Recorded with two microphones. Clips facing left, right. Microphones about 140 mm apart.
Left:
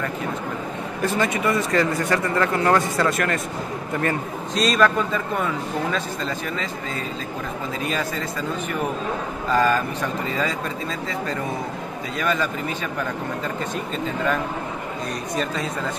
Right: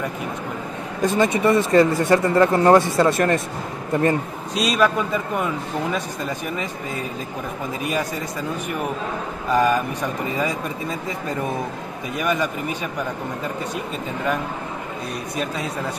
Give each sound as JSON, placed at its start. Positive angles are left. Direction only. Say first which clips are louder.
{"t": 1.0, "sound": "speech", "louder": "right 4 dB", "side_deg": -20}
{"t": 4.6, "sound": "a man's voice", "louder": "even", "side_deg": -10}
{"t": 7.8, "sound": "a man's voice", "louder": "right 2 dB", "side_deg": -15}
{"t": 9.5, "sound": "a man's voice", "louder": "right 1 dB", "side_deg": -15}
{"t": 12.2, "sound": "a man's voice", "louder": "right 1 dB", "side_deg": -15}